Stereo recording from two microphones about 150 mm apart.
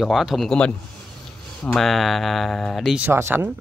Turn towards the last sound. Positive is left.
turn(degrees=-15)  # may be behind; listen again after turning